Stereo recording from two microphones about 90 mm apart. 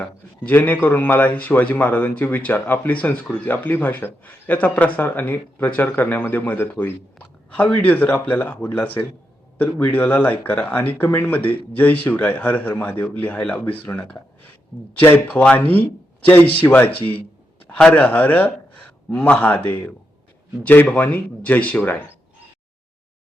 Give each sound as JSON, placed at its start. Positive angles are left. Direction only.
{"t": 0.4, "sound": "a man's voice", "side_deg": 20}